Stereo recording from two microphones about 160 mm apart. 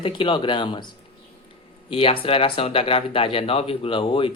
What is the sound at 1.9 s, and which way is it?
Speech, 35° left (ahead or behind).